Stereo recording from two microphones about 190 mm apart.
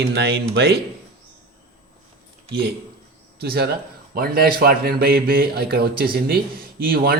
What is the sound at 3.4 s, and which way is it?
Speech, 55° right (ahead or behind).